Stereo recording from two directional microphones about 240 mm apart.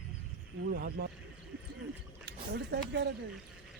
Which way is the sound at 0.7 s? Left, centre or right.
Right.